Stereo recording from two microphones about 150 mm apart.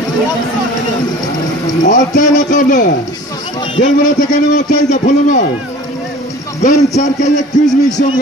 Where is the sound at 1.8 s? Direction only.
55° left (ahead or behind).